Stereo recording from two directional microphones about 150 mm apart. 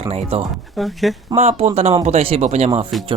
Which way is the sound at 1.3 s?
45° right (ahead or behind).